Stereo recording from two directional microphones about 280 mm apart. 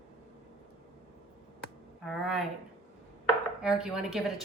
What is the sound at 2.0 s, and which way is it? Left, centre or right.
Speech, centre.